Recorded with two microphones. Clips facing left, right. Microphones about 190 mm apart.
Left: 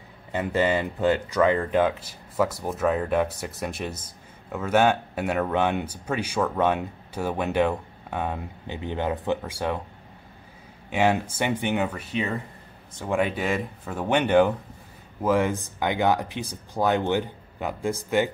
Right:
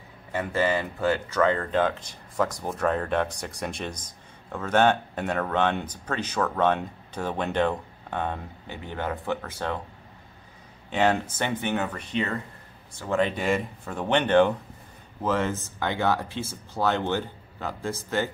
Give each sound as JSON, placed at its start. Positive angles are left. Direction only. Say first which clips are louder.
{"t": 0.3, "sound": "speech", "louder": "left 2 dB", "side_deg": 20}
{"t": 10.9, "sound": "speech", "louder": "left 1 dB", "side_deg": 10}
{"t": 13.4, "sound": "speech", "louder": "right 1 dB", "side_deg": 5}